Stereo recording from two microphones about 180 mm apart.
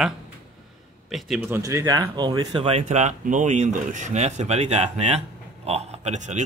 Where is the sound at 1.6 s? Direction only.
20° right (ahead or behind).